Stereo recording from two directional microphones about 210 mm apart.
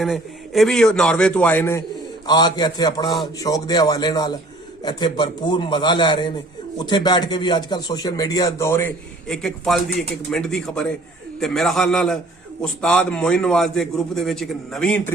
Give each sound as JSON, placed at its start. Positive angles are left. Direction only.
{"t": 0.0, "sound": "a man's voice", "side_deg": 0}
{"t": 2.2, "sound": "a man's voice", "side_deg": 20}